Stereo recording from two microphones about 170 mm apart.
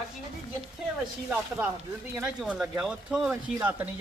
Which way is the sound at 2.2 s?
10° right (ahead or behind).